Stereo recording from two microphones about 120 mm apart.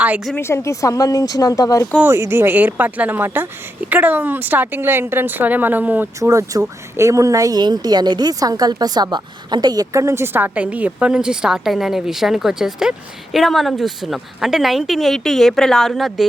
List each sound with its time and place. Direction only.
0.3 s speech: 20° left (ahead or behind)
2.0 s speech: 20° right (ahead or behind)
6.1 s a woman's voice: 25° right (ahead or behind); by 16.2 s centre (ahead or behind)